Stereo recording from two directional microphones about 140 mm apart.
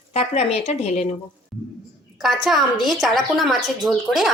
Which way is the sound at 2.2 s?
Centre (ahead or behind).